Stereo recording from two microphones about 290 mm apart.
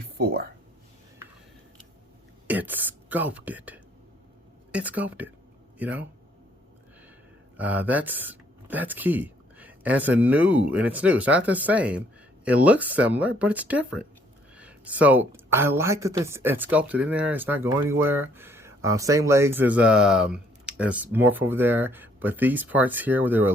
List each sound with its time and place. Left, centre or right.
0.2 s speech: right
2.5 s speech: centre
7.5 s a woman's voice: centre